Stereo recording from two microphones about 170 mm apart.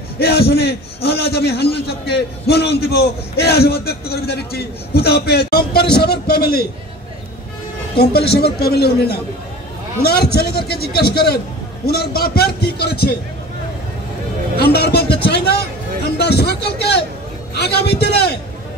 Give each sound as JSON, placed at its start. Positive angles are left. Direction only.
{"t": 0.2, "sound": "a man's voice", "side_deg": 70}
{"t": 7.9, "sound": "a man's voice", "side_deg": 70}
{"t": 14.6, "sound": "a sound", "side_deg": 70}
{"t": 15.2, "sound": "a man's voice", "side_deg": 75}